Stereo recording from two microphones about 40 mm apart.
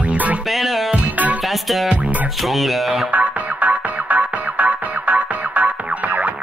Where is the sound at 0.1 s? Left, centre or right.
Right.